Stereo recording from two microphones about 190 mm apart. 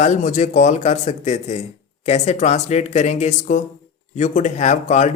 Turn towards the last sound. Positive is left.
turn(degrees=35)  # may be behind; listen again after turning